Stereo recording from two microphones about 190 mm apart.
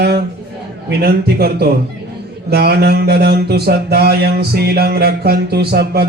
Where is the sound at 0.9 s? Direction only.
55° right (ahead or behind).